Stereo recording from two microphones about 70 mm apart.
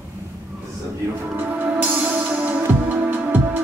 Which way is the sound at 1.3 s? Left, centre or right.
Right.